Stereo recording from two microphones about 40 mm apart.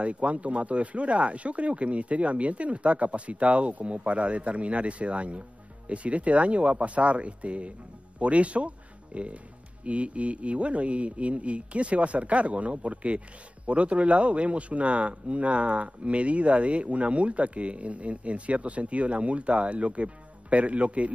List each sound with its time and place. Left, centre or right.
0.0 s speech: right